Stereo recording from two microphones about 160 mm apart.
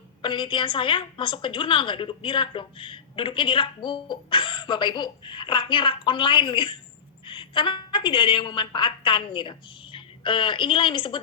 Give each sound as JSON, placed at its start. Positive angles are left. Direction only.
{"t": 0.2, "sound": "a woman's voice", "side_deg": 30}